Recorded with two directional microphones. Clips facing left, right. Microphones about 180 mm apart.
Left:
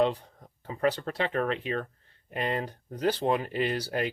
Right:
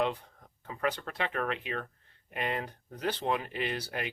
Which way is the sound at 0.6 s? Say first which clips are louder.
Left 6 dB; 30° left (ahead or behind).